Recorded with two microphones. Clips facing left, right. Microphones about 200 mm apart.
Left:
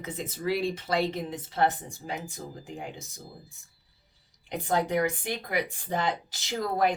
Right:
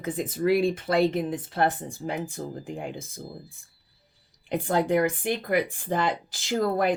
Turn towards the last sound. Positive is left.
turn(degrees=-50)  # may be behind; listen again after turning